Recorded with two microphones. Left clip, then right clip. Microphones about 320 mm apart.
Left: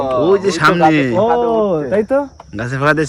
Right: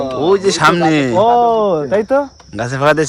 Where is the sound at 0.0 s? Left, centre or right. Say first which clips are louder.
Left 3 dB; centre.